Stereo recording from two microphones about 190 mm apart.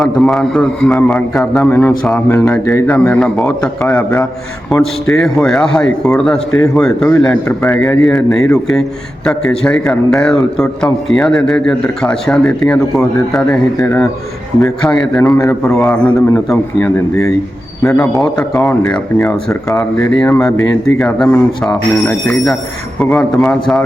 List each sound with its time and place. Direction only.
0.0 s speech: centre (ahead or behind)
23.0 s speech: 10° left (ahead or behind)